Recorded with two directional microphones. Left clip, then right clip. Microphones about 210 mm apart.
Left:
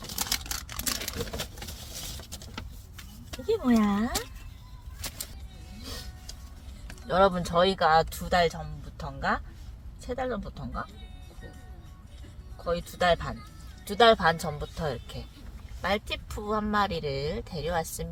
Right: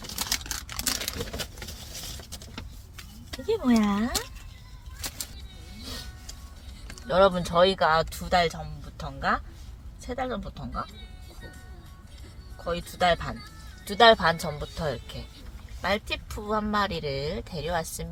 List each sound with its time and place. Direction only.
0.0 s camera: 15° left (ahead or behind)
0.7 s a sound: centre (ahead or behind)
1.2 s vehicle: 20° left (ahead or behind)
3.3 s speech: centre (ahead or behind)
4.9 s a sound: 5° right (ahead or behind)
5.8 s vehicle: centre (ahead or behind)
6.8 s speech: centre (ahead or behind)
12.6 s speech: centre (ahead or behind)